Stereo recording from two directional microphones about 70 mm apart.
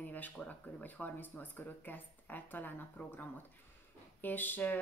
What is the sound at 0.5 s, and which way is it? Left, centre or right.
Speech, left.